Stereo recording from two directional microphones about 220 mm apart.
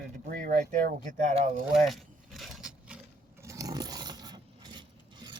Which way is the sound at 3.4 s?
15° right (ahead or behind).